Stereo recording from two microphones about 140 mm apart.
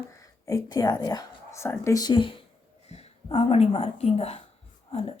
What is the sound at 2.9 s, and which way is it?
Speech, 50° left (ahead or behind).